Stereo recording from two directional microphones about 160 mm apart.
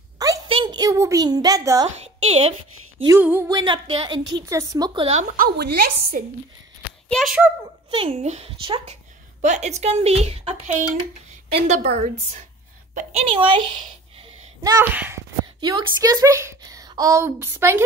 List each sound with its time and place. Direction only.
0.5 s a child's voice: 30° right (ahead or behind)
2.0 s a woman's voice: 45° right (ahead or behind)
3.1 s a sound: 10° right (ahead or behind)
3.4 s a woman's voice: 30° right (ahead or behind)
5.3 s a woman's voice: 75° right (ahead or behind)
7.1 s a child's voice: 5° left (ahead or behind)
7.9 s a woman's voice: 35° right (ahead or behind)
11.5 s a woman's voice: 45° right (ahead or behind); by 14.9 s 25° right (ahead or behind)
15.0 s a sound: 15° right (ahead or behind)
15.6 s a woman's voice: 25° right (ahead or behind)